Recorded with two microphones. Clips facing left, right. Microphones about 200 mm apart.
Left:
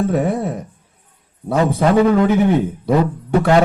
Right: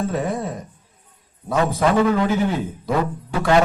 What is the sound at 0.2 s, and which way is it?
Speech, 60° left (ahead or behind).